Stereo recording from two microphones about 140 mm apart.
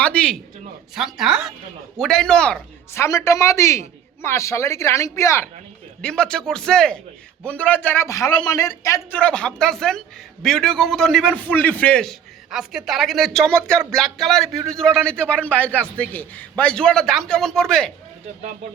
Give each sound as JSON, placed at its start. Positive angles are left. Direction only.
{"t": 0.0, "sound": "a man's voice", "side_deg": 5}
{"t": 2.9, "sound": "a man's voice", "side_deg": 20}
{"t": 6.0, "sound": "a man's voice", "side_deg": 5}
{"t": 9.1, "sound": "a man's voice", "side_deg": 10}